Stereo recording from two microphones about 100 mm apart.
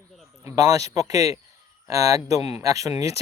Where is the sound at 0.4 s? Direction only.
35° right (ahead or behind).